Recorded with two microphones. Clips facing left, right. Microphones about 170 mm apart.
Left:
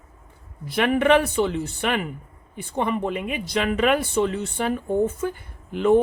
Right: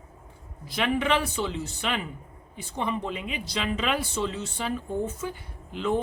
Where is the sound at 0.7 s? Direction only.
55° left (ahead or behind).